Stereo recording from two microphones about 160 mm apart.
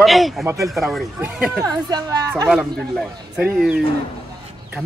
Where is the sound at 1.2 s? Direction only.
15° right (ahead or behind).